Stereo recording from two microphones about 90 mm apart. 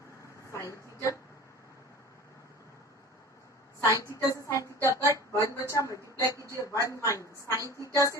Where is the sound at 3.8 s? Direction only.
35° left (ahead or behind).